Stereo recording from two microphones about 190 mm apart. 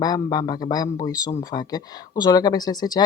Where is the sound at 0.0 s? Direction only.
20° left (ahead or behind).